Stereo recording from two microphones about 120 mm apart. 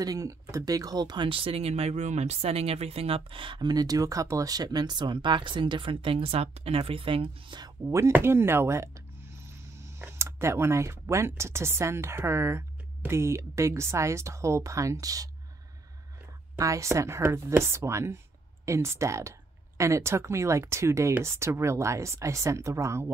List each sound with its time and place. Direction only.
0.0 s speech: 30° right (ahead or behind)
7.9 s speech: 20° right (ahead or behind)
16.5 s speech: 25° right (ahead or behind)